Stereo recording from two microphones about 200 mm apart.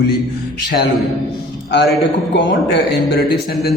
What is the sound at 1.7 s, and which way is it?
A man's voice, 55° left (ahead or behind).